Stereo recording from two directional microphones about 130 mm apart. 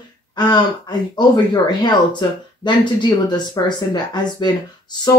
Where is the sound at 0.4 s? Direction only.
35° left (ahead or behind).